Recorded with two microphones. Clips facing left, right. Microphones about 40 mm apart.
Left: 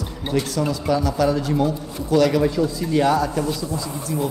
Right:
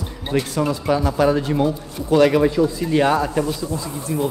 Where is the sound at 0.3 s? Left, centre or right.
Right.